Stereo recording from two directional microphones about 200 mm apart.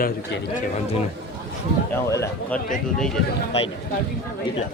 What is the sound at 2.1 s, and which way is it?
Speech, 15° left (ahead or behind).